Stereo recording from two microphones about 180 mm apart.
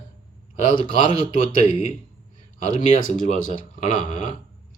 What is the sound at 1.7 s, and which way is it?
Speech, 45° left (ahead or behind).